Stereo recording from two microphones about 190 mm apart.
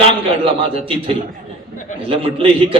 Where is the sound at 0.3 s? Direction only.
30° right (ahead or behind).